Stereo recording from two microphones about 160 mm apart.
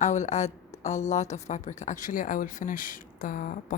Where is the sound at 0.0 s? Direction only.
45° left (ahead or behind).